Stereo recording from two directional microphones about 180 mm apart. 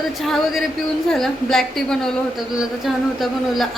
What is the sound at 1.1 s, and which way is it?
A woman's voice, centre (ahead or behind).